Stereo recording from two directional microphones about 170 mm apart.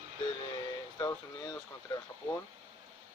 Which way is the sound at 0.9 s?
20° left (ahead or behind).